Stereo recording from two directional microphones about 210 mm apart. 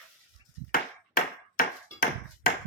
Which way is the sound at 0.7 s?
40° left (ahead or behind).